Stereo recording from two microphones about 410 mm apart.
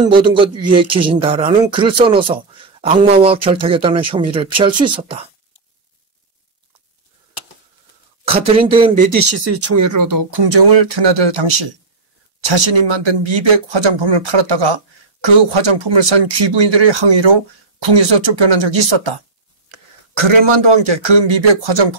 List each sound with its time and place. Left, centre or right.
0.1 s speech: centre
8.3 s speech: centre
9.3 s speech: right
12.5 s speech: right
20.7 s speech: right